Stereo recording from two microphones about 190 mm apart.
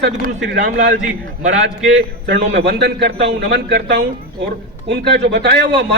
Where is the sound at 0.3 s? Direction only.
65° right (ahead or behind).